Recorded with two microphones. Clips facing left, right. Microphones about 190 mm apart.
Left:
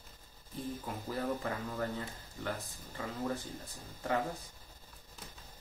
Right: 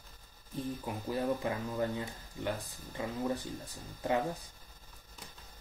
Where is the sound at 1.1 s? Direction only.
15° right (ahead or behind).